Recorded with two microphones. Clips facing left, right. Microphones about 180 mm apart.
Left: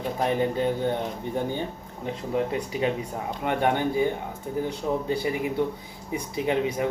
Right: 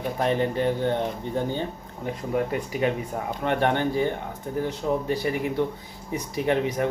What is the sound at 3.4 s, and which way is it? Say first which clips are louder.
Speech: right 1 dB; 10° left (ahead or behind).